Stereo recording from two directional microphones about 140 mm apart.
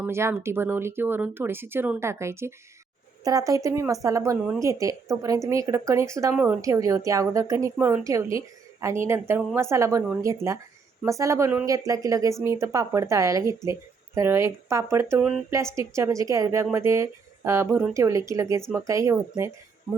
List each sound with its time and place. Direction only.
0.0 s a woman's voice: 20° right (ahead or behind)
6.3 s speech: 10° right (ahead or behind)
6.6 s a woman's voice: 25° right (ahead or behind)
15.2 s speech: 10° right (ahead or behind)
15.5 s a woman's voice: 20° right (ahead or behind)